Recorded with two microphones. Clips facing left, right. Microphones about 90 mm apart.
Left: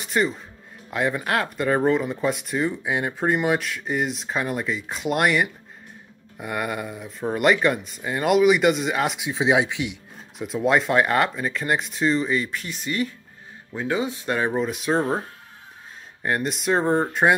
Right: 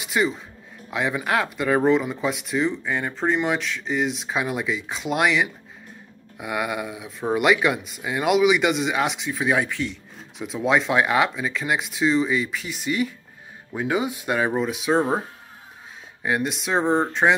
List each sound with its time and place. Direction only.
0.0 s a man's voice: centre (ahead or behind)
2.7 s speech: 10° left (ahead or behind)
9.3 s speech: 20° left (ahead or behind)
10.4 s speech: centre (ahead or behind)
16.2 s speech: centre (ahead or behind)